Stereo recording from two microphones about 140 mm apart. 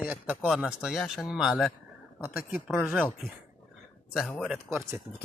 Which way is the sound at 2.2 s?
15° right (ahead or behind).